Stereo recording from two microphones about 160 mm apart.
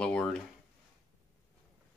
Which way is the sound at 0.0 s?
5° left (ahead or behind).